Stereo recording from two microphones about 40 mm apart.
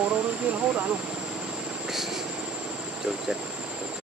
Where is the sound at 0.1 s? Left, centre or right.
Right.